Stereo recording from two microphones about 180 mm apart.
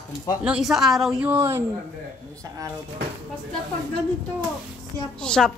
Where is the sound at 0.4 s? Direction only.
5° right (ahead or behind).